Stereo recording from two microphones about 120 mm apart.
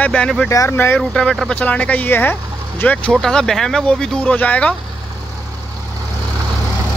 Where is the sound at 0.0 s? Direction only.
10° left (ahead or behind).